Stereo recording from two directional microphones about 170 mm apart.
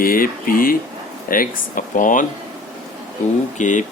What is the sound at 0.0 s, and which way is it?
Speech, 55° left (ahead or behind).